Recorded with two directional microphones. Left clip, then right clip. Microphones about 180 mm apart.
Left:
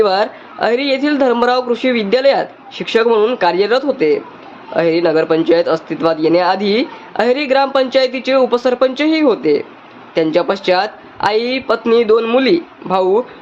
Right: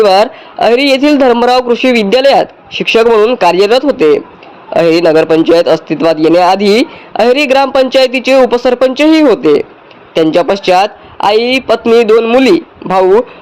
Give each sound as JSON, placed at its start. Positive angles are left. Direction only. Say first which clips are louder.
{"t": 0.0, "sound": "a man's voice", "louder": "right 7 dB", "side_deg": -35}